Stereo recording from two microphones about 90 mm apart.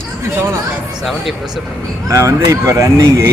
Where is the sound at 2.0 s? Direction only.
40° right (ahead or behind).